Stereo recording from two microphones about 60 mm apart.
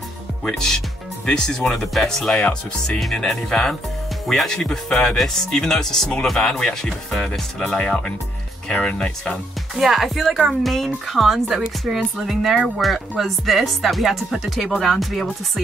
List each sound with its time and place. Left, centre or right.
0.5 s speech: centre
9.8 s speech: centre